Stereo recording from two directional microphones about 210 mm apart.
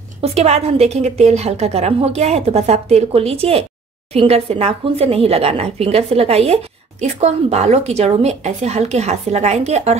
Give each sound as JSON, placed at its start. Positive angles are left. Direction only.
{"t": 0.2, "sound": "speech", "side_deg": -30}